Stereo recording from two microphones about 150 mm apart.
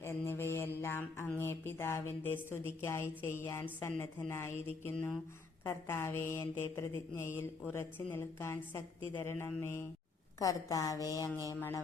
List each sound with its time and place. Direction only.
0.0 s mantra: 15° left (ahead or behind)
1.4 s a sound: 15° left (ahead or behind)
10.4 s a woman's voice: 25° left (ahead or behind)